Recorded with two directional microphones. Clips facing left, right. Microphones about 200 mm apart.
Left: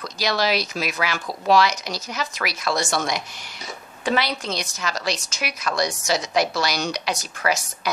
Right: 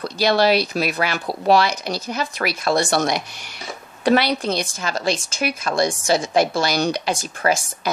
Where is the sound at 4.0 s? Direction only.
65° right (ahead or behind).